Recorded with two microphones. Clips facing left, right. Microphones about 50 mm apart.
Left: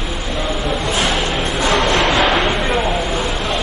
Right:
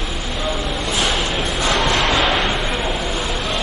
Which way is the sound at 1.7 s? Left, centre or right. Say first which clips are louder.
Left 3 dB; centre.